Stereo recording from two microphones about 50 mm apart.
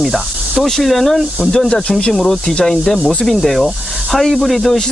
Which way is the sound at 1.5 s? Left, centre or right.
Centre.